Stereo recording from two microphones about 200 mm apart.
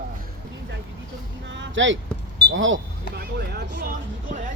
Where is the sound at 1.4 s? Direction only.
65° right (ahead or behind).